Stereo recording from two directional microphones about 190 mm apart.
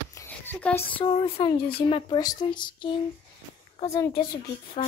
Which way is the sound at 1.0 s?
30° left (ahead or behind).